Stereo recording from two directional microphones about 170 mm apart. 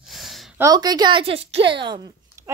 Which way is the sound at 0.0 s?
Centre (ahead or behind).